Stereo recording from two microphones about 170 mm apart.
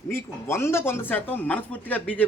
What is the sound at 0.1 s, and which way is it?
Speech, 15° left (ahead or behind).